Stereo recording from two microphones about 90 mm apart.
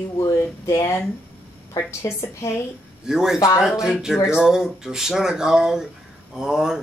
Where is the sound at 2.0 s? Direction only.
30° left (ahead or behind).